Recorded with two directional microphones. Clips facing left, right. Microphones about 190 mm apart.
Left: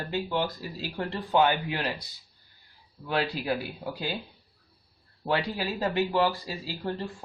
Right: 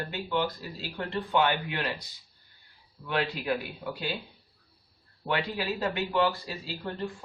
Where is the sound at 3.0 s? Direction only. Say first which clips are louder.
Left 1 dB; 35° left (ahead or behind).